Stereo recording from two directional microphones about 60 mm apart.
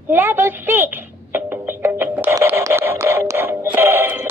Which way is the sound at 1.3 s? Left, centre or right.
Right.